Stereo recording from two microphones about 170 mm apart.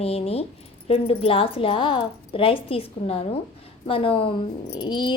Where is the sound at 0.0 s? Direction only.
35° left (ahead or behind).